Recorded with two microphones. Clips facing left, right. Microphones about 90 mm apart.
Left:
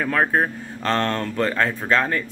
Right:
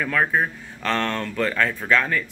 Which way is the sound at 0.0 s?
30° left (ahead or behind).